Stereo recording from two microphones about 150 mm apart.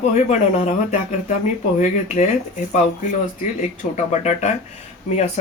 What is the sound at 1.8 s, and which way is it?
Speech, 55° left (ahead or behind).